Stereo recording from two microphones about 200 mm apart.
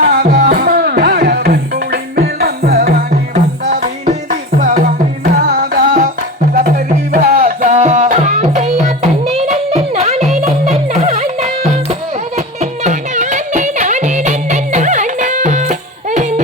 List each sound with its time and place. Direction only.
0.0 s music: 50° right (ahead or behind)
3.1 s music: 40° right (ahead or behind)